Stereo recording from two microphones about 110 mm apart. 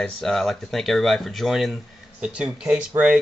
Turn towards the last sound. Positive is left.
turn(degrees=-10)  # may be behind; listen again after turning